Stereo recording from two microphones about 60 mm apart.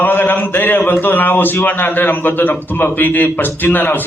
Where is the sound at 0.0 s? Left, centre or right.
Left.